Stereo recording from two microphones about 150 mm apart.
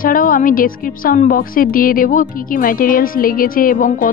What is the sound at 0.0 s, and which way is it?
A woman's voice, 65° left (ahead or behind).